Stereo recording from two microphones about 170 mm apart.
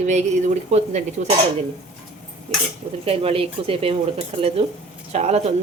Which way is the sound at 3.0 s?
35° right (ahead or behind).